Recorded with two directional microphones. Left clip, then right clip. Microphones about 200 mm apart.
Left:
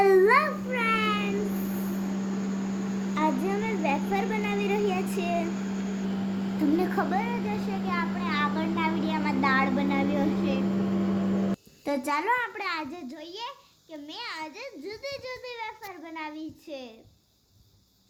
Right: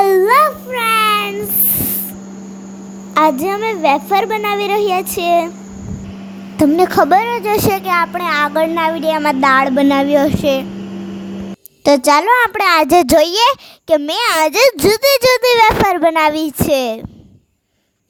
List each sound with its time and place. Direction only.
0.0 s a sound: 45° right (ahead or behind)
3.2 s a child's voice: 50° right (ahead or behind)
6.7 s a child's voice: 50° right (ahead or behind)
11.9 s a child's voice: 50° right (ahead or behind); by 17.0 s 65° right (ahead or behind)